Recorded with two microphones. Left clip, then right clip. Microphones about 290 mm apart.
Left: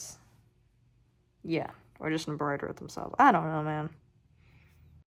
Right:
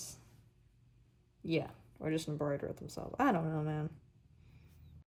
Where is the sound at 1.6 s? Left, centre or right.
Left.